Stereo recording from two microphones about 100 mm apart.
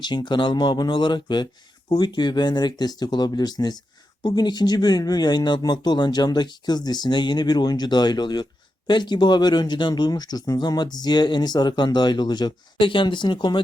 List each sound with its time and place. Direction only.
0.0 s speech: 50° left (ahead or behind)